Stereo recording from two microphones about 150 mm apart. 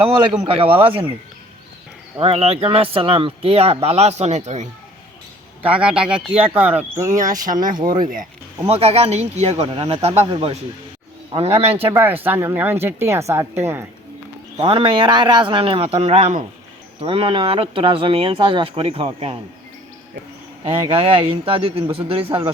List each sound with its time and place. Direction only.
0.4 s speech: 35° right (ahead or behind)
2.1 s speech: 40° right (ahead or behind)
5.6 s speech: 10° right (ahead or behind)
7.2 s speech: 60° right (ahead or behind)
7.7 s speech: 30° right (ahead or behind)
8.6 s speech: 45° right (ahead or behind)
11.9 s speech: 15° right (ahead or behind)
14.5 s speech: 35° right (ahead or behind)
20.7 s speech: 40° right (ahead or behind)